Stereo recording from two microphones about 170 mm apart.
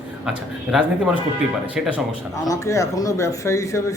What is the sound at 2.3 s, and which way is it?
Speech, 20° left (ahead or behind).